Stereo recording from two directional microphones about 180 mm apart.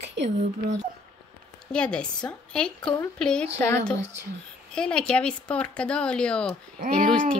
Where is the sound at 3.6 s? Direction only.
20° left (ahead or behind).